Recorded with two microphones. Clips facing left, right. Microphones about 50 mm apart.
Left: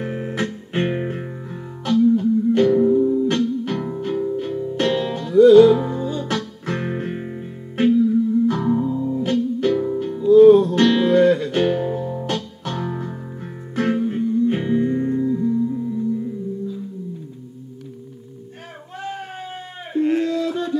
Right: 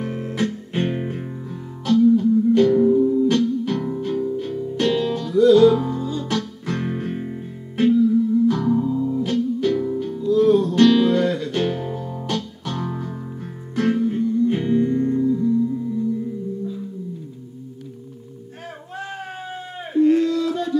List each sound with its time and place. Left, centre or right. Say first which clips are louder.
0.0 s music: even; left
2.7 s music: even; centre
3.3 s music: right 1 dB; left
9.2 s music: left 1 dB; left
12.8 s music: left 1 dB; centre
20.0 s a sound: right 3 dB; left